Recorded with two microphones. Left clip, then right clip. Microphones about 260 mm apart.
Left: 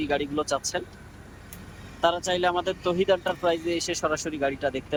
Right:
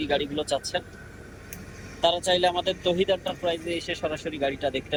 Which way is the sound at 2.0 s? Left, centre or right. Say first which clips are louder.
Right 1 dB; centre.